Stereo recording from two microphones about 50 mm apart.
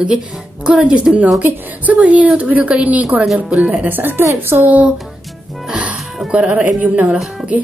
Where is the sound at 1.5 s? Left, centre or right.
Right.